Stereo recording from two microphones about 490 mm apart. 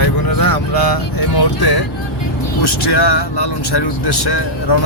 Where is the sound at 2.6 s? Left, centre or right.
Left.